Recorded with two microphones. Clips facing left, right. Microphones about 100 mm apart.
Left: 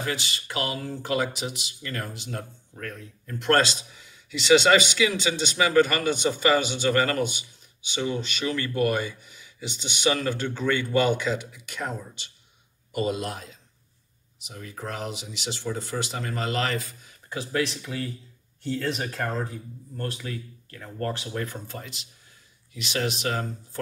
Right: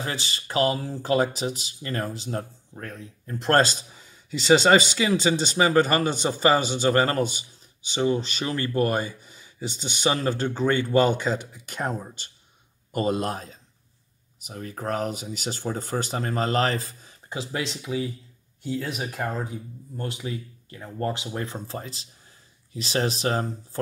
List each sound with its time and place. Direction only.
0.0 s a man's voice: 35° right (ahead or behind)
17.3 s a man's voice: 20° right (ahead or behind)